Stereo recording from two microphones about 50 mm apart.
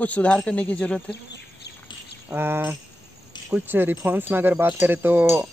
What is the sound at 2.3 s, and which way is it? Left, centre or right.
Speech, right.